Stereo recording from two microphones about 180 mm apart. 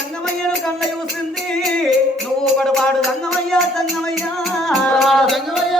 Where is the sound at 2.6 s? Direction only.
5° left (ahead or behind).